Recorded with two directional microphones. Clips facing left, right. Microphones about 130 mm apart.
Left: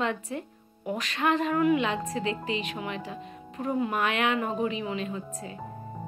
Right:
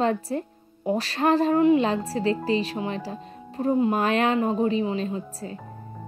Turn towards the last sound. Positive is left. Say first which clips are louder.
# right 4 dB
turn(degrees=-35)  # may be behind; listen again after turning